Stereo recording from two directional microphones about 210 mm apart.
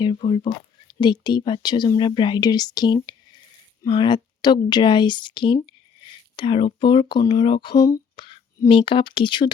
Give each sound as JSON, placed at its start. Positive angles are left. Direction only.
{"t": 0.0, "sound": "speech", "side_deg": 25}